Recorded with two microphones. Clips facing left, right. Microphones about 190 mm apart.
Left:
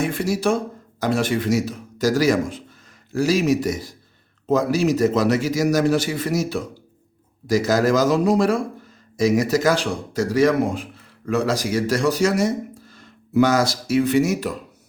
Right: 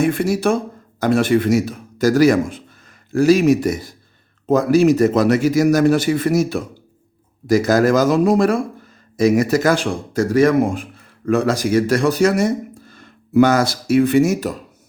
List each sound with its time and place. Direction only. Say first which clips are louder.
0.0 s a man's voice: right 4 dB; 55° right (ahead or behind)